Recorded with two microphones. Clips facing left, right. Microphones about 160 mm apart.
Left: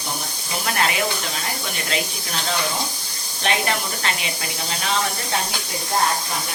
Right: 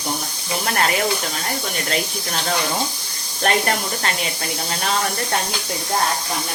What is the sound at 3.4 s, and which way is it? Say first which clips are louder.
Speech: right 3 dB; 45° right (ahead or behind).